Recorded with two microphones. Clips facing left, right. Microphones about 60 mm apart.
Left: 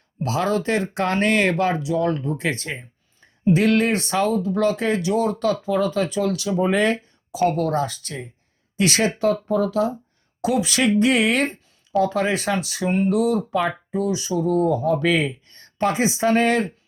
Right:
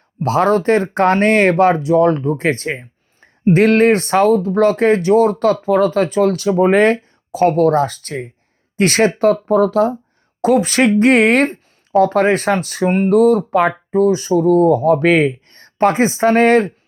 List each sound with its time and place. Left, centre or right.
0.2 s speech: right